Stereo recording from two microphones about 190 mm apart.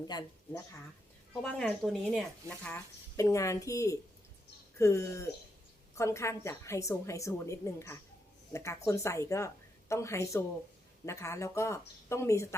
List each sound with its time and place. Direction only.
0.1 s speech: 20° left (ahead or behind)
1.3 s speech: 5° left (ahead or behind)
2.6 s a woman's voice: 10° left (ahead or behind)